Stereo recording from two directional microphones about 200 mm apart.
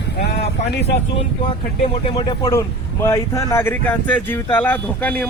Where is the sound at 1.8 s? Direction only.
25° left (ahead or behind).